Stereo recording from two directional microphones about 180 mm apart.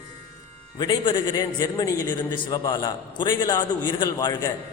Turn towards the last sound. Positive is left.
turn(degrees=20)  # may be behind; listen again after turning